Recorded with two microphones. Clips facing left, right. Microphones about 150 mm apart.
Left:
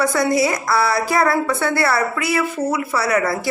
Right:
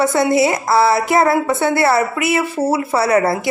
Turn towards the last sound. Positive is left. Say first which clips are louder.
# right 4 dB
turn(degrees=-30)  # may be behind; listen again after turning